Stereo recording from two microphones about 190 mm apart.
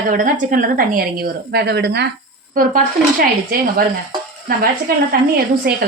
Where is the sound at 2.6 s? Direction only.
45° right (ahead or behind).